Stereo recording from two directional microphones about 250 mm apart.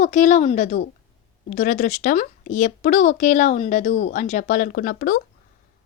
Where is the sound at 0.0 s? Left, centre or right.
Left.